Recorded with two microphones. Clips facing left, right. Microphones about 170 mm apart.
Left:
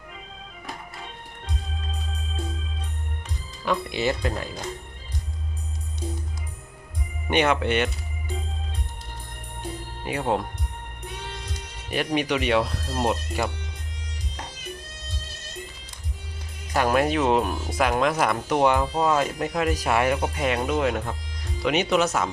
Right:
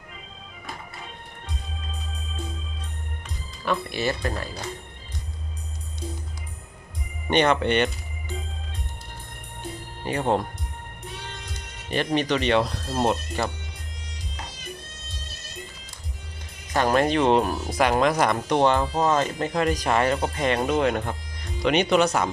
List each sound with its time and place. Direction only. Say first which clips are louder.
3.7 s speech: left 1 dB; 15° left (ahead or behind)
7.3 s speech: right 1 dB; 5° left (ahead or behind)
10.0 s speech: right 2 dB; 5° left (ahead or behind)
11.3 s music: left 2 dB; 5° left (ahead or behind)
13.0 s speech: right 1 dB; 5° left (ahead or behind)
16.7 s speech: right 1 dB; 10° left (ahead or behind)